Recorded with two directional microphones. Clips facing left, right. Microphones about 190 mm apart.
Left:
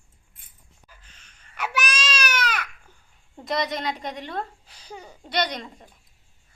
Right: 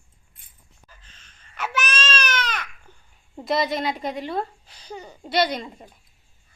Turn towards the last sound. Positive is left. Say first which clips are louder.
# right 4 dB
turn(degrees=-5)  # may be behind; listen again after turning